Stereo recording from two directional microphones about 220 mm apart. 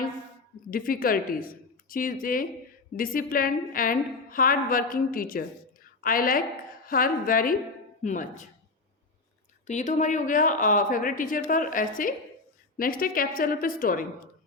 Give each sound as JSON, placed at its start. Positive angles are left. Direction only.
{"t": 0.7, "sound": "a woman's voice", "side_deg": 40}
{"t": 9.6, "sound": "a woman's voice", "side_deg": 35}